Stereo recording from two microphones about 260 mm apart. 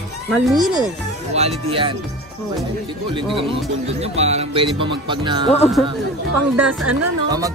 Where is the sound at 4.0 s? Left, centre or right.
Right.